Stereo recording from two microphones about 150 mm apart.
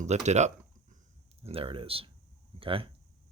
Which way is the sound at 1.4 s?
40° right (ahead or behind).